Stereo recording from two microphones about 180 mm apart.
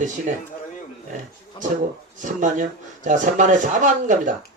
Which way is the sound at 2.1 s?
45° right (ahead or behind).